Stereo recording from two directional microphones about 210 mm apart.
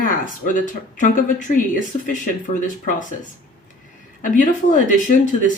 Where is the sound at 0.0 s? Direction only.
40° left (ahead or behind).